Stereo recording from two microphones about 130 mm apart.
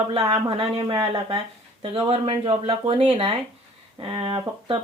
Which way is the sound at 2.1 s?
45° right (ahead or behind).